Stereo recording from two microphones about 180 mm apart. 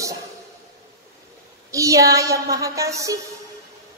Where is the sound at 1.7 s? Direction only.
15° right (ahead or behind).